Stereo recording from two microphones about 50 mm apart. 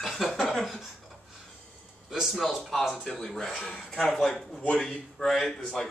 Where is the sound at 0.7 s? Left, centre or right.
Centre.